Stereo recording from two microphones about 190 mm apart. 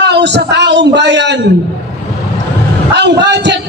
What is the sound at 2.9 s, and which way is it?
Speech, 65° right (ahead or behind).